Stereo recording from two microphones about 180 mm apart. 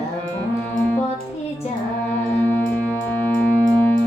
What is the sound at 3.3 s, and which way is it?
Music, 10° left (ahead or behind).